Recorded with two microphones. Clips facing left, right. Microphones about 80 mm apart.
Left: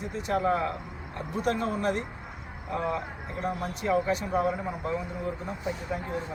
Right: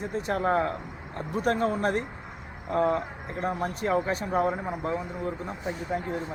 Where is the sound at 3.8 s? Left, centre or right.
Right.